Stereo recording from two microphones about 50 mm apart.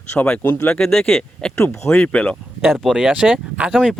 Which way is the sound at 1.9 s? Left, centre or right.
Left.